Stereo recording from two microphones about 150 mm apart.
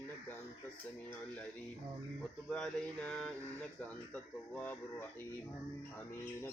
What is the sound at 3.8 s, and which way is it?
Speech, 10° left (ahead or behind).